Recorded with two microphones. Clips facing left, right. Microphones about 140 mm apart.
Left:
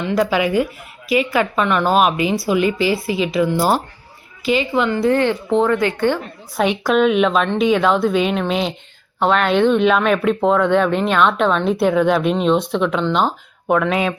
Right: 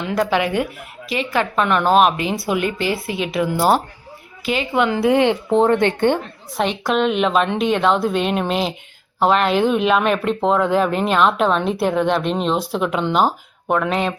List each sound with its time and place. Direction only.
0.0 s speech: centre (ahead or behind); by 6.1 s 20° right (ahead or behind)
6.8 s speech: centre (ahead or behind)